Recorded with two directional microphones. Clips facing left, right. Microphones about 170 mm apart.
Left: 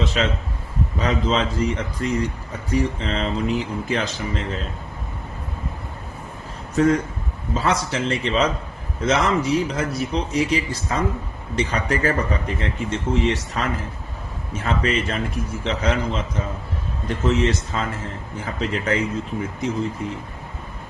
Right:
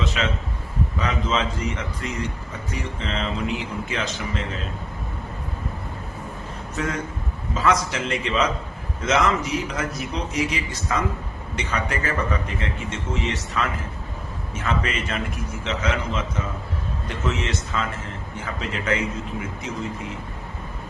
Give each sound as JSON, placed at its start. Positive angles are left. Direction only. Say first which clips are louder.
{"t": 0.2, "sound": "speech", "louder": "left 3 dB", "side_deg": 35}
{"t": 6.7, "sound": "speech", "louder": "left 10 dB", "side_deg": 35}